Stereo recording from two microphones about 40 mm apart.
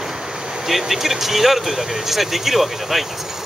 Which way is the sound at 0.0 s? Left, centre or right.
Centre.